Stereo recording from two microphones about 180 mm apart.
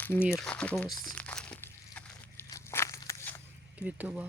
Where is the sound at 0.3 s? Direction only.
5° left (ahead or behind).